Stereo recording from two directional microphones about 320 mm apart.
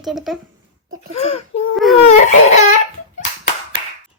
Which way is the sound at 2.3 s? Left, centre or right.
Left.